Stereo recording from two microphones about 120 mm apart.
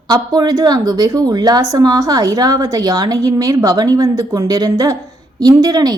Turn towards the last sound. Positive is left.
turn(degrees=-35)  # may be behind; listen again after turning